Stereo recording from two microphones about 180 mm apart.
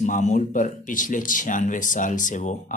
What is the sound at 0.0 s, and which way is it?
Speech, 45° left (ahead or behind).